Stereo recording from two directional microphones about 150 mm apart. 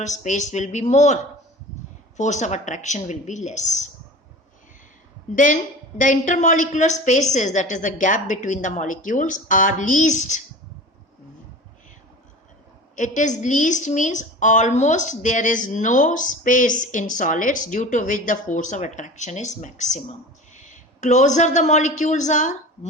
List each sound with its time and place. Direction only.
0.0 s speech: 50° left (ahead or behind)
5.3 s a woman's voice: 60° left (ahead or behind)
13.0 s a woman's voice: 55° left (ahead or behind)